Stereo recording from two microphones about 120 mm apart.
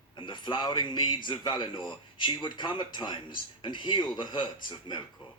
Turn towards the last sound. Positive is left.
turn(degrees=45)  # may be behind; listen again after turning